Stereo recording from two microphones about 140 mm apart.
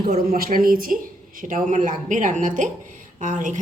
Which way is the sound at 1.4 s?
70° right (ahead or behind).